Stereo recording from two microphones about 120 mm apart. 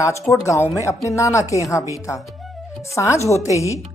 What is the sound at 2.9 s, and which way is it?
Speech, 25° left (ahead or behind).